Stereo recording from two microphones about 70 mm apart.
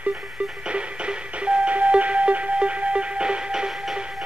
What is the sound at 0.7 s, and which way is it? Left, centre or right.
Music, centre.